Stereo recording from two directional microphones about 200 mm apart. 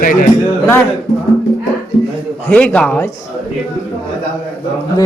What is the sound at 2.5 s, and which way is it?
Speech, 5° left (ahead or behind).